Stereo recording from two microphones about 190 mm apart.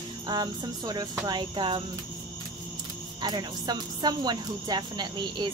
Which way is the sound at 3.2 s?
20° right (ahead or behind).